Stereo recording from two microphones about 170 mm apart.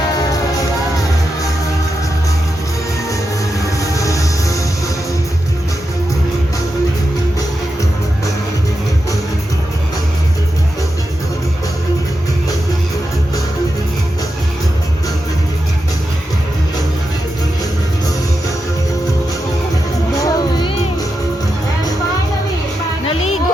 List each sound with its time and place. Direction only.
3.8 s music: 20° left (ahead or behind)
20.2 s music: 25° left (ahead or behind)